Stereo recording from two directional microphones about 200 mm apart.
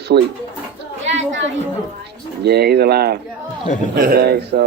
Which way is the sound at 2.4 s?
55° right (ahead or behind).